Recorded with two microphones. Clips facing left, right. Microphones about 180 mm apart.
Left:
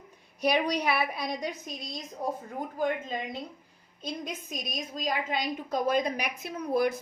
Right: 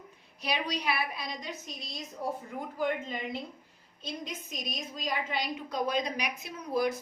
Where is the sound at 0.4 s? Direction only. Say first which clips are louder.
Left 6 dB; 50° left (ahead or behind).